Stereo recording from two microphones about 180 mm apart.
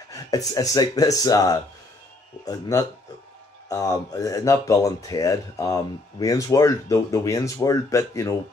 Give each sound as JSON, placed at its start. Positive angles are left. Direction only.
{"t": 0.1, "sound": "speech", "side_deg": 20}